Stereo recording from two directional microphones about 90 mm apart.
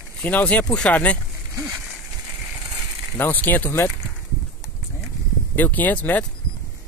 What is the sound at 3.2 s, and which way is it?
Speech, 20° left (ahead or behind).